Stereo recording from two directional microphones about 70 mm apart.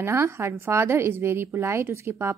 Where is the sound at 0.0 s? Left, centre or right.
Right.